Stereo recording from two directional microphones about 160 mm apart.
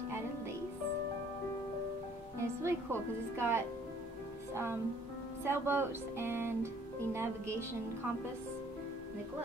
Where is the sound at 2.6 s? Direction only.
15° right (ahead or behind).